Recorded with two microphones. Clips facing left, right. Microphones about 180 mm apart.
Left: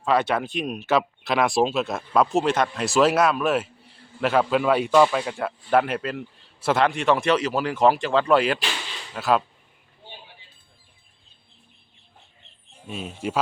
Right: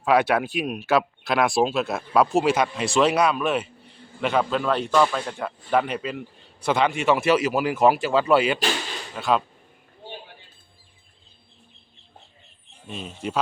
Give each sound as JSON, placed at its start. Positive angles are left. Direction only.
{"t": 0.0, "sound": "speech", "side_deg": -10}
{"t": 12.9, "sound": "speech", "side_deg": 5}